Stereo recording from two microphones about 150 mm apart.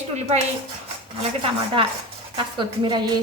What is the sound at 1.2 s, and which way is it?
A woman's voice, 35° right (ahead or behind).